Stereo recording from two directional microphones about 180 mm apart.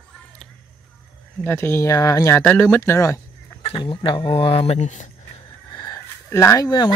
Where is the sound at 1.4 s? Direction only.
10° left (ahead or behind).